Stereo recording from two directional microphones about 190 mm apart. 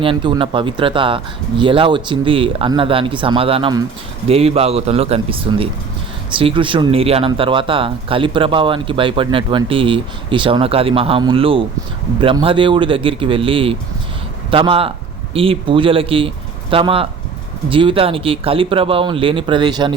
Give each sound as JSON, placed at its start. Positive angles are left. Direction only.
{"t": 0.0, "sound": "a man's voice", "side_deg": -25}